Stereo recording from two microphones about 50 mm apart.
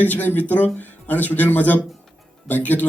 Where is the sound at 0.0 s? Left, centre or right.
Left.